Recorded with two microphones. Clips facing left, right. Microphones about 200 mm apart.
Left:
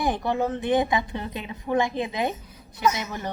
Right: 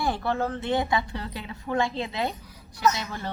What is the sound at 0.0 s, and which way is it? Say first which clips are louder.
A woman's voice: left 2 dB; 15° left (ahead or behind).